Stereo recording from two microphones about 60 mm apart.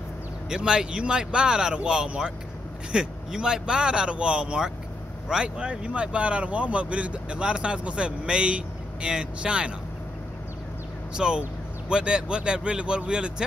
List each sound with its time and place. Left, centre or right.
0.5 s speech: centre
11.1 s speech: centre